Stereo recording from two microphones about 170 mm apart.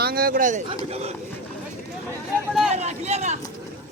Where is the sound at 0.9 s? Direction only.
40° right (ahead or behind).